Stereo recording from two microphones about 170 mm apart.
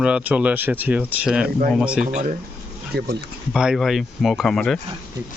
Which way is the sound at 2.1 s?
45° right (ahead or behind).